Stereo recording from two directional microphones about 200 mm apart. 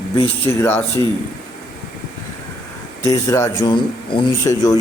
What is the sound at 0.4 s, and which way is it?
Speech, 10° left (ahead or behind).